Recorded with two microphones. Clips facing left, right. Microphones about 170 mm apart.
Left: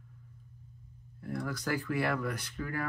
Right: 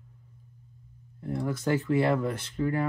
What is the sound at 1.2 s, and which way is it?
Speech, 25° right (ahead or behind).